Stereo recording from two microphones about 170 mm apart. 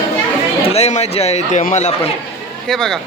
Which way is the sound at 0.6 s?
35° left (ahead or behind).